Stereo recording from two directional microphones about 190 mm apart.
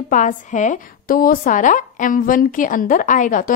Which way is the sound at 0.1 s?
40° left (ahead or behind).